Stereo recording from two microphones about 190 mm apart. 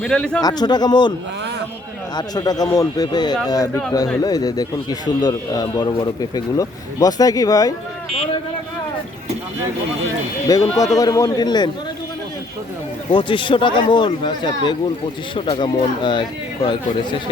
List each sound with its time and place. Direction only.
0.0 s a man's voice: 5° left (ahead or behind)
0.4 s a man's voice: 20° left (ahead or behind)
2.1 s a man's voice: 20° left (ahead or behind)
10.5 s a man's voice: 20° left (ahead or behind)
13.1 s a man's voice: 25° left (ahead or behind)